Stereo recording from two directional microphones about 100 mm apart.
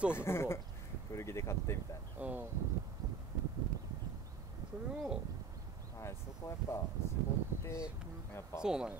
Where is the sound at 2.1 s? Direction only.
15° right (ahead or behind).